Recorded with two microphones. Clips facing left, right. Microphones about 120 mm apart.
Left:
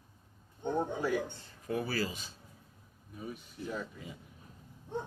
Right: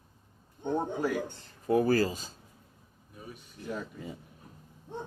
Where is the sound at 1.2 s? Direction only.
40° right (ahead or behind).